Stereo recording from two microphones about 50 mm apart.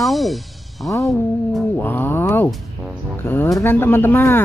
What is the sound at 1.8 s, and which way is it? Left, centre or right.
Speech, left.